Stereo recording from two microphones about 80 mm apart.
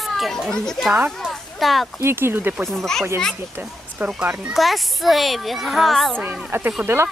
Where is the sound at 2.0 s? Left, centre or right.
Right.